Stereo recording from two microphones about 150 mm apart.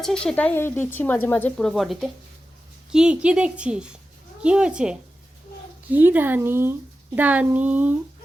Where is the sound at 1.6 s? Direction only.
Centre (ahead or behind).